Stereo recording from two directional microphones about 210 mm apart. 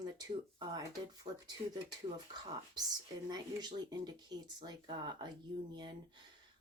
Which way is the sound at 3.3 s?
20° right (ahead or behind).